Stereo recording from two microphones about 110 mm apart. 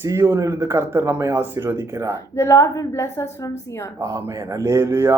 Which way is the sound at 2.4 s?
25° left (ahead or behind).